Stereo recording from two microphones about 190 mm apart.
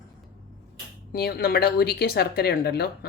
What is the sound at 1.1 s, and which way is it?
Speech, 55° left (ahead or behind).